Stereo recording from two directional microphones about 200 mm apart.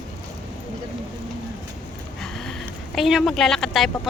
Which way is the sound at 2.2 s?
Centre (ahead or behind).